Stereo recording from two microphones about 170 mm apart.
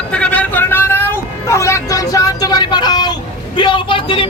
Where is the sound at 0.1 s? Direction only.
10° left (ahead or behind).